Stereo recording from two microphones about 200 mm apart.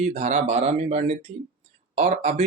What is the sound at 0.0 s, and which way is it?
Speech, 35° right (ahead or behind).